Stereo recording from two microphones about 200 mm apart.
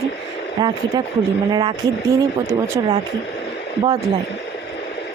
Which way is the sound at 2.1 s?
15° right (ahead or behind).